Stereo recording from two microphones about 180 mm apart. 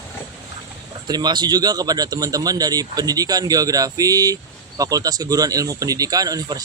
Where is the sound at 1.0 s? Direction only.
25° right (ahead or behind).